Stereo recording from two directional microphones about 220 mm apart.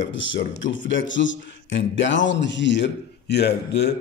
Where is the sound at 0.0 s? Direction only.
55° left (ahead or behind).